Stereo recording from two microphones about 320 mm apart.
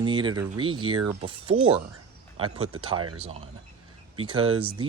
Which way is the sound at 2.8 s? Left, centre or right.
Centre.